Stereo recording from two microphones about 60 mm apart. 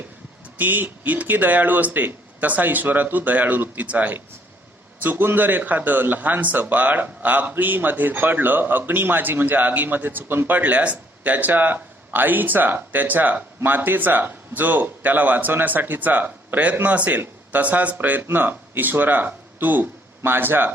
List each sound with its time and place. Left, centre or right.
0.6 s a man's voice: right